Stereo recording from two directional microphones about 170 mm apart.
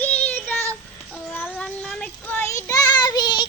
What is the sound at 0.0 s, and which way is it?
Child singing, 10° left (ahead or behind).